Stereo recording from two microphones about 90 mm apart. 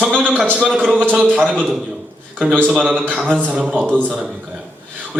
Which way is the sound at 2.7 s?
10° right (ahead or behind).